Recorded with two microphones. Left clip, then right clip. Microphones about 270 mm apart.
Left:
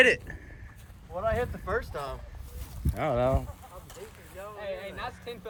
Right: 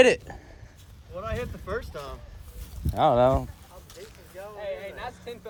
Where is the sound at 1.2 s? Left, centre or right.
Centre.